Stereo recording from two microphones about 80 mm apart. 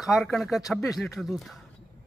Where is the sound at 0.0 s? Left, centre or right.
Centre.